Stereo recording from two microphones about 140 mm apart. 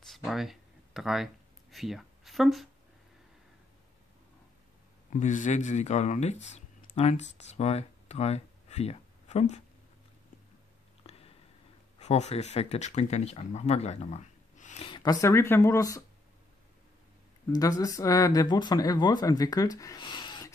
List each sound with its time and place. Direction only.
0.0 s a sound: centre (ahead or behind)
5.1 s speech: 65° left (ahead or behind)
11.1 s a sound: 45° left (ahead or behind)
12.0 s speech: 50° left (ahead or behind)
14.9 s speech: 30° left (ahead or behind)
17.5 s speech: 25° left (ahead or behind)